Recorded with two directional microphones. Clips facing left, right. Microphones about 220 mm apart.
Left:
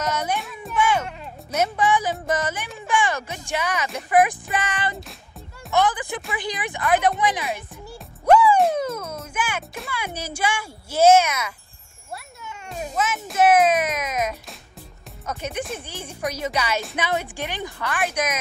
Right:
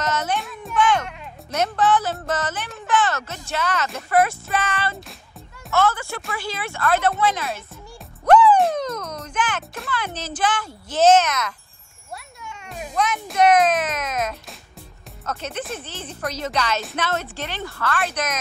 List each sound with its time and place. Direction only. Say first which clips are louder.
0.0 s music: right 1 dB; 10° left (ahead or behind)
0.4 s a woman's voice: right 2 dB; centre (ahead or behind)
8.3 s music: right 1 dB; 10° left (ahead or behind)
12.9 s a woman's voice: right 2 dB; 5° left (ahead or behind)